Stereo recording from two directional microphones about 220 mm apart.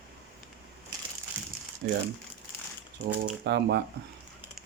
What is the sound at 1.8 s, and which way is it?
Speech, 50° right (ahead or behind).